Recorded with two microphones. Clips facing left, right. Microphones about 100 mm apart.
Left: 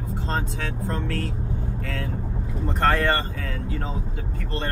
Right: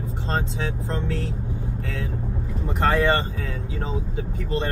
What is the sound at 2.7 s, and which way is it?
Speech, 15° right (ahead or behind).